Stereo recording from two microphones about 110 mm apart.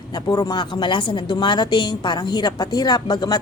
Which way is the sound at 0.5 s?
45° left (ahead or behind).